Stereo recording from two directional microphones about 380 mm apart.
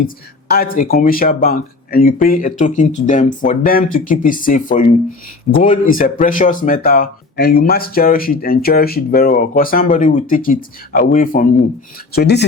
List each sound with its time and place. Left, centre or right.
0.5 s speech: left